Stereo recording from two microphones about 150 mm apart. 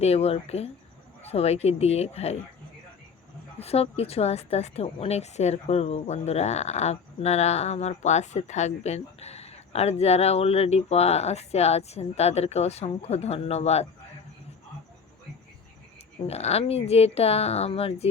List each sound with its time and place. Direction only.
0.0 s a woman's voice: 45° left (ahead or behind)
3.6 s a woman's voice: 40° left (ahead or behind)
16.2 s a woman's voice: 45° left (ahead or behind)